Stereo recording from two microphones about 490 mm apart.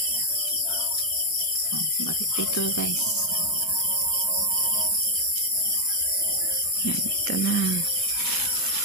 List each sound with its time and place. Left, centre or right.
2.0 s music: left
7.2 s speech: left